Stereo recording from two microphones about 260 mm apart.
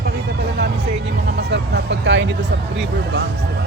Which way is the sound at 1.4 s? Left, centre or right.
Right.